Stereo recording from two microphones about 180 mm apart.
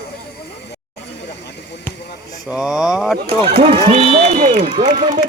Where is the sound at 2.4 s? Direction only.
5° right (ahead or behind).